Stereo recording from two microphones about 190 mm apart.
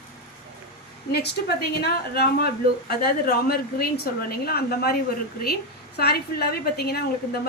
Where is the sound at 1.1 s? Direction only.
55° left (ahead or behind).